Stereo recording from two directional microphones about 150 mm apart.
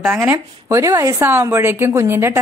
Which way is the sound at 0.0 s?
15° right (ahead or behind).